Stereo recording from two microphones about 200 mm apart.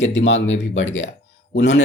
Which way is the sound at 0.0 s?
65° left (ahead or behind).